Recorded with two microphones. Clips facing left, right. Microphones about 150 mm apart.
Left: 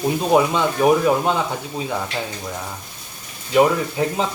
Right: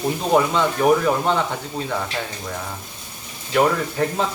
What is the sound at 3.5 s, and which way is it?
Speech, 10° left (ahead or behind).